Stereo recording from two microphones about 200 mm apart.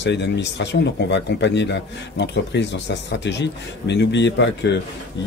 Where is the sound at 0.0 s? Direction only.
60° left (ahead or behind).